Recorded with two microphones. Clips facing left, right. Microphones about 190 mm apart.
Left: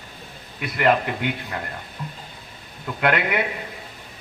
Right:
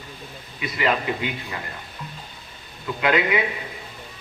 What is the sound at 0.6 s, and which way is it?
A man's voice, 60° left (ahead or behind).